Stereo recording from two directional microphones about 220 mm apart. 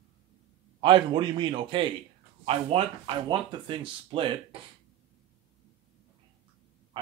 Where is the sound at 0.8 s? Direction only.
20° right (ahead or behind).